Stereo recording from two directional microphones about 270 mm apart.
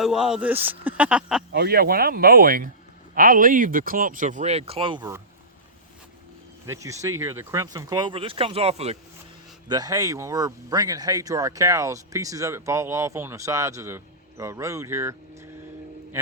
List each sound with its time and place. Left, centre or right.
0.0 s speech: centre
1.5 s speech: right; by 5.2 s centre
6.7 s speech: centre